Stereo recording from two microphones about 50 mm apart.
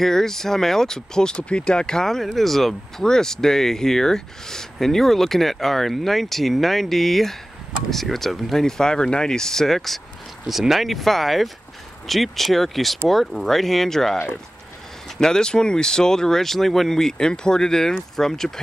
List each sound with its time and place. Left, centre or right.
0.0 s speech: centre
10.4 s speech: centre